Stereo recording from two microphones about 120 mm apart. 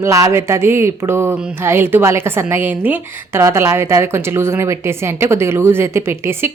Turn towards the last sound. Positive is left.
turn(degrees=-20)  # may be behind; listen again after turning